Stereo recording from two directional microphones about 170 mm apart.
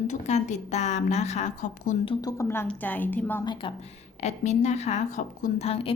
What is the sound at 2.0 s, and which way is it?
A woman's voice, 25° left (ahead or behind).